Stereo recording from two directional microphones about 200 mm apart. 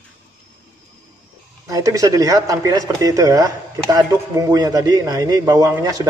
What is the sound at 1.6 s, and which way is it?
Speech, 15° right (ahead or behind).